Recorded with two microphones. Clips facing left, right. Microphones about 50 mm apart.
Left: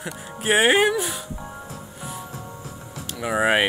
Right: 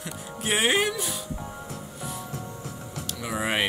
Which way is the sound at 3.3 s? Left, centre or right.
Left.